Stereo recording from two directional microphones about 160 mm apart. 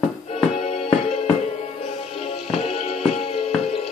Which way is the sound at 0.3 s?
45° left (ahead or behind).